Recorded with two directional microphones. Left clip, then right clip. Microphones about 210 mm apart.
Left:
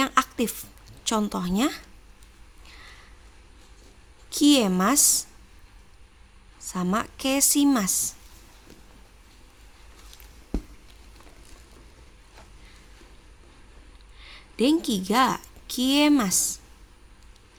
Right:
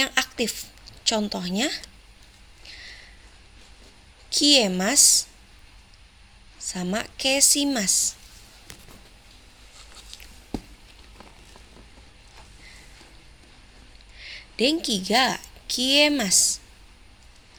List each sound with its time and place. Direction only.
0.0 s a sound: 35° left (ahead or behind)
1.2 s speech: 35° left (ahead or behind)
2.6 s a sound: 30° left (ahead or behind)
4.4 s speech: 35° left (ahead or behind)
6.7 s speech: 35° left (ahead or behind)
14.2 s a woman's voice: 30° left (ahead or behind)
16.3 s a woman's voice: 55° left (ahead or behind)